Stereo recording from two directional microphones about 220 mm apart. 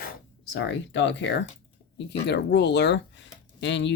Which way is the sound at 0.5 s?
55° left (ahead or behind).